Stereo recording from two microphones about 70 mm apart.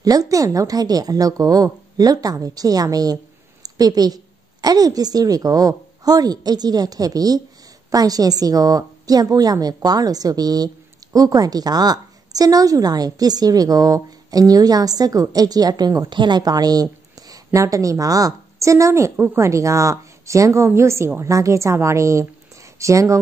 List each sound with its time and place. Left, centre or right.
0.0 s a woman's voice: right
16.1 s a woman's voice: right
17.5 s a woman's voice: right